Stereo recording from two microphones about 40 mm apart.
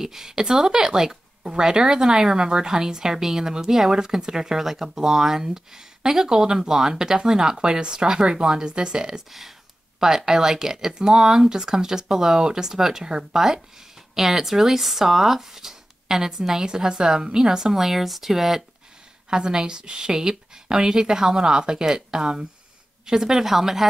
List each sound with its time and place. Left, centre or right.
0.0 s speech: centre
19.3 s speech: centre